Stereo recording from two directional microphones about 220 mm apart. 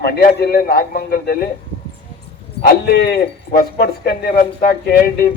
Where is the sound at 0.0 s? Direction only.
45° left (ahead or behind).